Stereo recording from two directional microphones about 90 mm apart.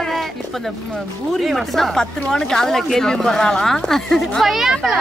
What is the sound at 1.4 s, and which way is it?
A woman's voice, centre (ahead or behind).